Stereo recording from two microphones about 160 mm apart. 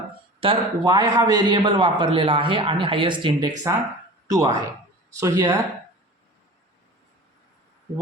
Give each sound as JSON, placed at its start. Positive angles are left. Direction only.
{"t": 0.3, "sound": "a man's voice", "side_deg": -30}